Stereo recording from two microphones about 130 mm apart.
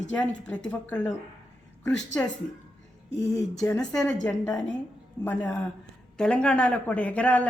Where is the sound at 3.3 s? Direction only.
25° left (ahead or behind).